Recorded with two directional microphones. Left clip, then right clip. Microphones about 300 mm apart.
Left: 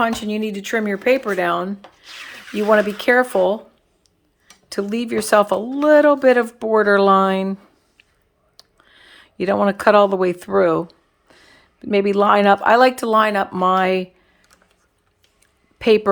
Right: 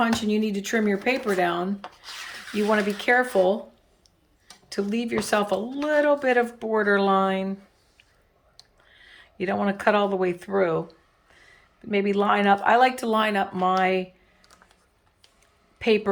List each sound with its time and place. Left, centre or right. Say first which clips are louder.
0.0 s speech: left 4 dB; centre
4.7 s speech: left 5 dB; centre
15.8 s speech: left 7 dB; centre